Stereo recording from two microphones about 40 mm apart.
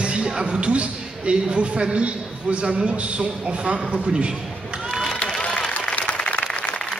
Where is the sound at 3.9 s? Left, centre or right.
Right.